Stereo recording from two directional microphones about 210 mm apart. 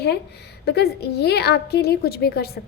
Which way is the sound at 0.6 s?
50° left (ahead or behind).